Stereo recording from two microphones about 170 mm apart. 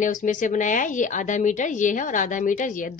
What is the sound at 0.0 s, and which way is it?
A woman's voice, 50° left (ahead or behind).